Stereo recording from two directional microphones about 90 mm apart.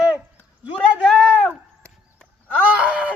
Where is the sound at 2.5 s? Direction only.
15° right (ahead or behind).